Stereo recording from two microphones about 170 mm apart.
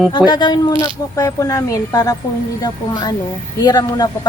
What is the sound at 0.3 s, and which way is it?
A woman's voice, 25° left (ahead or behind).